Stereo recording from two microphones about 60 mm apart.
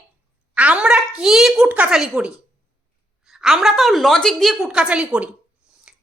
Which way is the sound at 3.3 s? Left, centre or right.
Centre.